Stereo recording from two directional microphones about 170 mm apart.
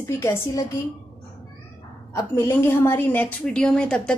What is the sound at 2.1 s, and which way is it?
A woman's voice, 15° left (ahead or behind).